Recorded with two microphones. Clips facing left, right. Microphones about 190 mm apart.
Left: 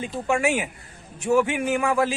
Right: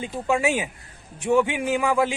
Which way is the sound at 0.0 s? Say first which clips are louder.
Even; 15° right (ahead or behind).